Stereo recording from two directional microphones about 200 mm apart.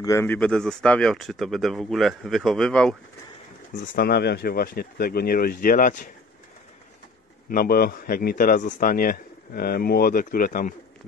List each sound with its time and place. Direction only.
0.0 s speech: 15° left (ahead or behind)
3.9 s a man's voice: 55° left (ahead or behind)
7.4 s a man's voice: 45° left (ahead or behind)